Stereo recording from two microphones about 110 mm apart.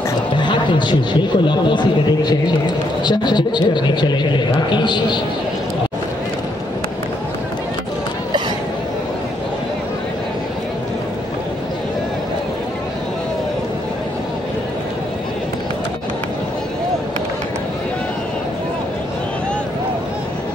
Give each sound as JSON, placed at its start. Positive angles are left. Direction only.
{"t": 0.4, "sound": "speech", "side_deg": 45}